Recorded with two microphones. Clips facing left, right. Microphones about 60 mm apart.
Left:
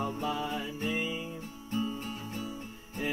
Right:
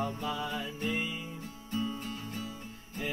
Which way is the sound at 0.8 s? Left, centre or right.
Centre.